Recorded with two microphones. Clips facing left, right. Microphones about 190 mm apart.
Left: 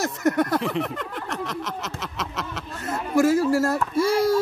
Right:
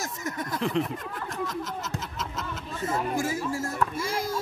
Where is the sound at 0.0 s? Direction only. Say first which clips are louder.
Left 11 dB; 70° left (ahead or behind).